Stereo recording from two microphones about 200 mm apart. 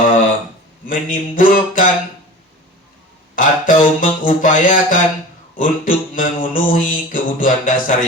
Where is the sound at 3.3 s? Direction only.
40° left (ahead or behind).